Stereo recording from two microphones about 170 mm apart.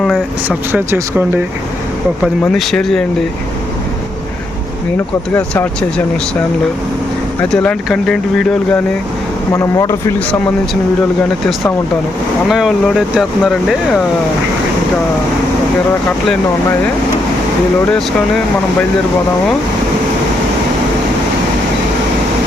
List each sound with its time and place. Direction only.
0.4 s speech: 15° right (ahead or behind)
2.4 s speech: centre (ahead or behind)
7.5 s speech: 5° left (ahead or behind)
9.5 s speech: 20° left (ahead or behind)
12.5 s speech: centre (ahead or behind)